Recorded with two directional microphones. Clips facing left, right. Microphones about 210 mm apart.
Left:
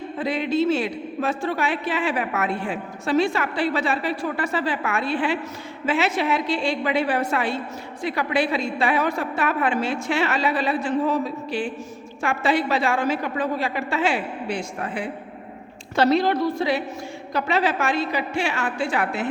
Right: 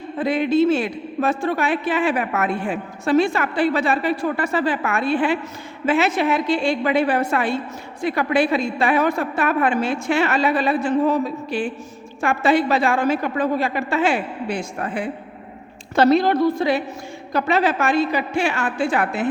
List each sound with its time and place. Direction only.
0.2 s a woman's voice: 50° right (ahead or behind)